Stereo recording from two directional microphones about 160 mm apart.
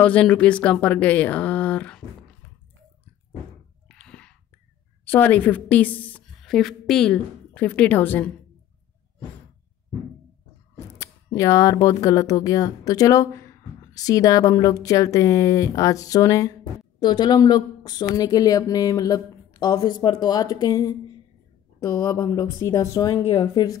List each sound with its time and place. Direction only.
0.0 s speech: 10° left (ahead or behind)
3.9 s whispering: 5° left (ahead or behind)
5.0 s a woman's voice: 10° left (ahead or behind)
11.0 s speech: 20° left (ahead or behind)